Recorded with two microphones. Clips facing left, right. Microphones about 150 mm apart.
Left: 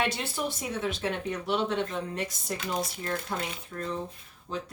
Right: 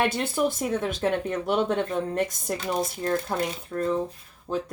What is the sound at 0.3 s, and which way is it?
Speech, 50° right (ahead or behind).